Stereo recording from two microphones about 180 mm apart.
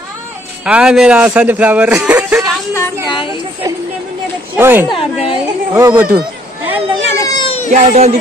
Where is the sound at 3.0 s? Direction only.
30° left (ahead or behind).